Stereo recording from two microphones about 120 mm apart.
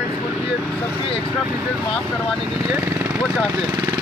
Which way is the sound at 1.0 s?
50° left (ahead or behind).